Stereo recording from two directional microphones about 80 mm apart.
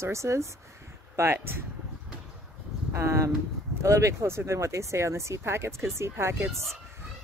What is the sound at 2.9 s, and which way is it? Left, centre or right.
Speech, right.